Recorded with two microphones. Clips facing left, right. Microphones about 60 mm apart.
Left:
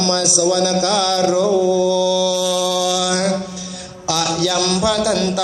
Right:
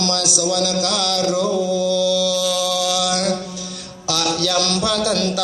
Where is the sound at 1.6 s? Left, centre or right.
Left.